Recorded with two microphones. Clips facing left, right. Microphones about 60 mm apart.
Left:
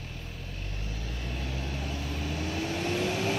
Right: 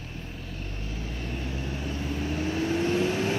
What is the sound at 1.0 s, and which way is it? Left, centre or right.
Vehicle, right.